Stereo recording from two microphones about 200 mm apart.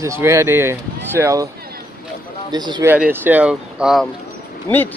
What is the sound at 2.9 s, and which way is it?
Speech, 10° right (ahead or behind).